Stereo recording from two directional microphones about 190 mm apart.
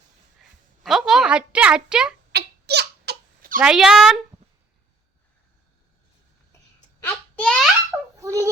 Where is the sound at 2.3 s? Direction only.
60° right (ahead or behind).